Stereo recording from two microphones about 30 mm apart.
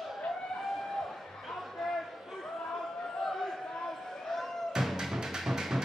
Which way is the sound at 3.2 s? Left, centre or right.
Centre.